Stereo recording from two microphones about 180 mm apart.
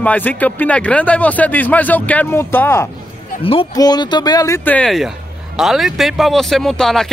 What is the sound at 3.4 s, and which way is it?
Speech, 30° left (ahead or behind).